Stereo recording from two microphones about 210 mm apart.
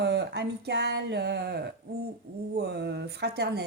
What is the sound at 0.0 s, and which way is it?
A woman's voice, 55° right (ahead or behind).